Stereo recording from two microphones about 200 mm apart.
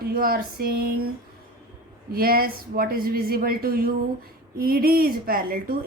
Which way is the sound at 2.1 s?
50° right (ahead or behind).